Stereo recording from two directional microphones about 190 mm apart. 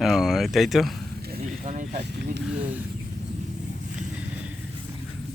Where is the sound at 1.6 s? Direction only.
35° right (ahead or behind).